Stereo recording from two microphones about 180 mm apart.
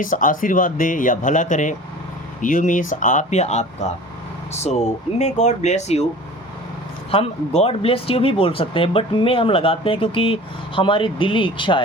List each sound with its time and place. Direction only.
0.0 s speech: 50° left (ahead or behind)
7.1 s speech: 35° left (ahead or behind)